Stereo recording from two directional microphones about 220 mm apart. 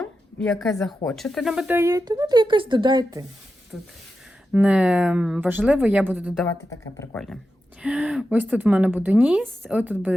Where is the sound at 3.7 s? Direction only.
Centre (ahead or behind).